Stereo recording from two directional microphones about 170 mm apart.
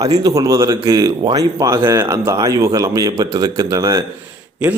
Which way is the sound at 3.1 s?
30° right (ahead or behind).